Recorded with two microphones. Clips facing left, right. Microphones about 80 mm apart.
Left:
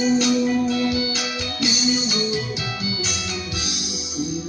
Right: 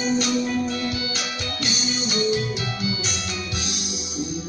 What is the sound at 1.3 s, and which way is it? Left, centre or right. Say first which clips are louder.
Music: left 3 dB; right.